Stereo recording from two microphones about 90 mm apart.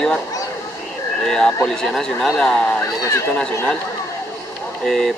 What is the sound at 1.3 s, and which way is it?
Speech, 5° left (ahead or behind).